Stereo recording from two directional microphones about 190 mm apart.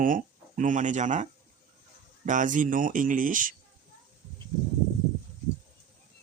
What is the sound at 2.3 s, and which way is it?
Speech, 40° right (ahead or behind).